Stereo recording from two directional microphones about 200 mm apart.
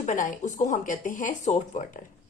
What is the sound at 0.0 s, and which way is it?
A woman's voice, 40° left (ahead or behind).